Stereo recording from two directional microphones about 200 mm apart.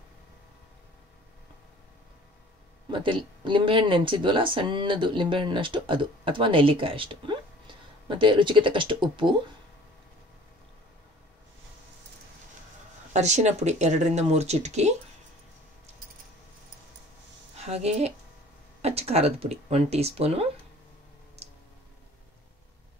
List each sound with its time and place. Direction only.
2.9 s speech: 25° right (ahead or behind)
13.1 s speech: 35° right (ahead or behind)
17.6 s speech: 30° right (ahead or behind)